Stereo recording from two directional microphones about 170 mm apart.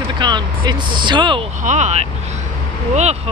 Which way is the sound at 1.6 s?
45° right (ahead or behind).